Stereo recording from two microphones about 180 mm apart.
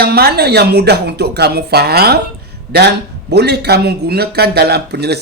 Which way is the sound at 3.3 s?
65° right (ahead or behind).